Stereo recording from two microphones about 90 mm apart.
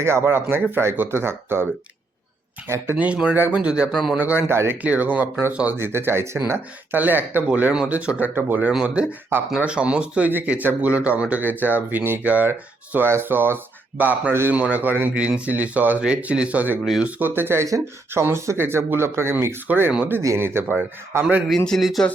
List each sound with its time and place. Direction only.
0.0 s speech: 30° right (ahead or behind)
2.6 s speech: 30° right (ahead or behind)
2.9 s speech: 15° right (ahead or behind)
4.8 s speech: 15° right (ahead or behind)
8.7 s speech: 10° right (ahead or behind); by 21.3 s 30° right (ahead or behind)
21.7 s speech: centre (ahead or behind)